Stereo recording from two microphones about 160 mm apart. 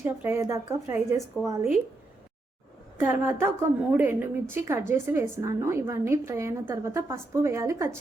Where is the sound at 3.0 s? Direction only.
15° right (ahead or behind).